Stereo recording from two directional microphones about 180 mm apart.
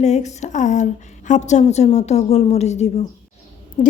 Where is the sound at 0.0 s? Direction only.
40° left (ahead or behind).